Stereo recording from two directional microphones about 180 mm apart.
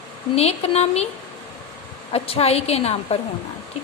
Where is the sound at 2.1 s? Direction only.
35° left (ahead or behind).